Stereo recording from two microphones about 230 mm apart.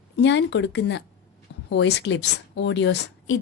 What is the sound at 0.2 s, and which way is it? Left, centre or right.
Speech, left.